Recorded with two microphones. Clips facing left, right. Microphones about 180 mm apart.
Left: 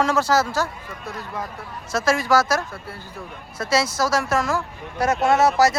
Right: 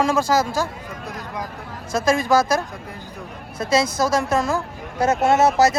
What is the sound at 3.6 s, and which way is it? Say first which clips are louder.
Speech: right 2 dB; 20° right (ahead or behind).